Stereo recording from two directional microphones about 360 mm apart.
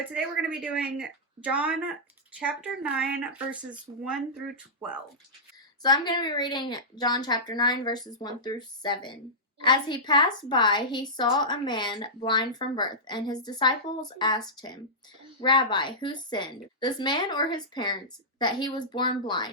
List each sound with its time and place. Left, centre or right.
0.1 s speech: centre
5.8 s a woman's voice: centre